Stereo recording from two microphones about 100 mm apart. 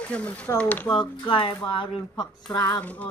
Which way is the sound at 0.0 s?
10° left (ahead or behind).